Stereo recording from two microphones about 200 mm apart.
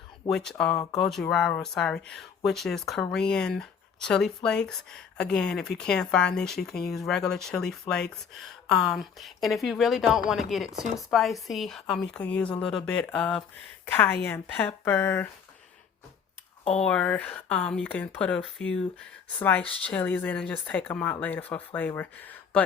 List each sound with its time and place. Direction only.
0.3 s speech: 5° left (ahead or behind)
16.8 s speech: 5° left (ahead or behind)